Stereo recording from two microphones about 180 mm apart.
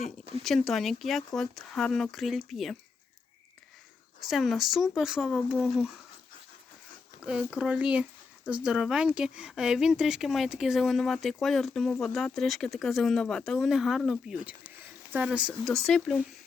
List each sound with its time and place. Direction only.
0.4 s speech: centre (ahead or behind)
4.3 s speech: centre (ahead or behind)
7.3 s speech: 5° right (ahead or behind)